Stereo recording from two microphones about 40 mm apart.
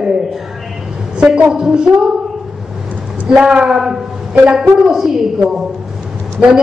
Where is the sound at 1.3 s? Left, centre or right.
Centre.